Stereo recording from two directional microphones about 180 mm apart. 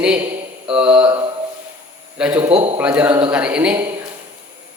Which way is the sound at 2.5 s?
30° right (ahead or behind).